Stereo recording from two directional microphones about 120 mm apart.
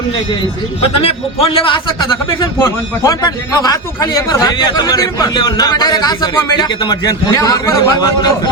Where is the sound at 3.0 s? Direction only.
30° left (ahead or behind).